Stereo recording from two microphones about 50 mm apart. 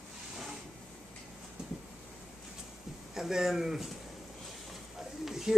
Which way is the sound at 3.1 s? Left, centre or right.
Centre.